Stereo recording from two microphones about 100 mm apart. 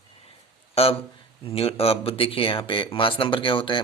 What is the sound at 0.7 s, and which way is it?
Speech, 75° left (ahead or behind).